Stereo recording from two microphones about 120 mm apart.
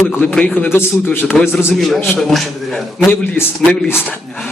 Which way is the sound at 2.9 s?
15° left (ahead or behind).